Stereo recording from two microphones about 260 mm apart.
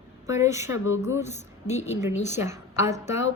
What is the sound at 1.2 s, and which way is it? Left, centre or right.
Speech, left.